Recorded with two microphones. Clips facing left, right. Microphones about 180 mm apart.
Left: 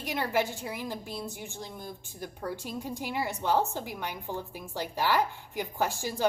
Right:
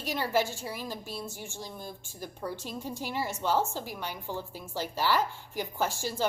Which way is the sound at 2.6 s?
15° left (ahead or behind).